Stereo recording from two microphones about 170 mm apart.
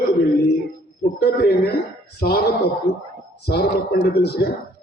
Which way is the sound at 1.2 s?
70° left (ahead or behind).